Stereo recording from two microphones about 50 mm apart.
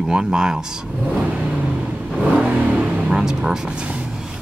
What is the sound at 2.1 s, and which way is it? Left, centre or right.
Vehicle, centre.